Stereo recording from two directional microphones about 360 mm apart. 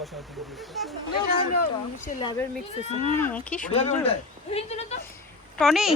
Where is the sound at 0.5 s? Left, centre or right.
Centre.